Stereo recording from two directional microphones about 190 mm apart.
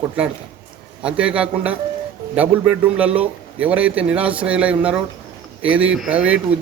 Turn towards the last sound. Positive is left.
turn(degrees=-5)  # may be behind; listen again after turning